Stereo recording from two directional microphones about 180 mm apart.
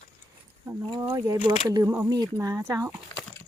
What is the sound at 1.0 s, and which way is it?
Speech, 15° right (ahead or behind).